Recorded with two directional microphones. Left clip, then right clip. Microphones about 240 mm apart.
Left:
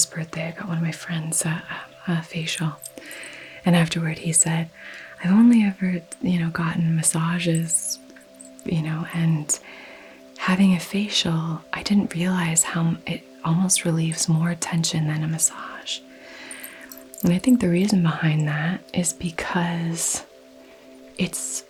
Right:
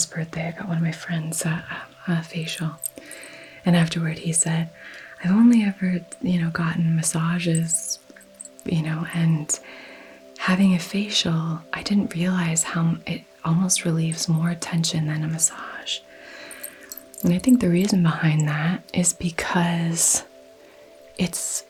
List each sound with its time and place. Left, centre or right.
0.0 s speech: centre; by 2.4 s left
2.4 s speech: left
7.9 s music: left
8.6 s speech: left; by 20.1 s centre
21.2 s speech: left